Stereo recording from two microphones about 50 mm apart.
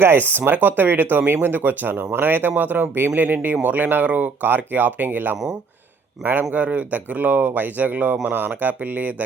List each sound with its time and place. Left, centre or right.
0.0 s speech: right
6.5 s speech: right